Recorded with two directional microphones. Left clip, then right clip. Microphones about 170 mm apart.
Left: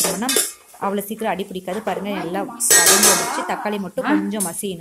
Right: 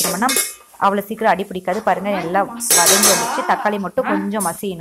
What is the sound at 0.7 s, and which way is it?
Speech, 5° left (ahead or behind).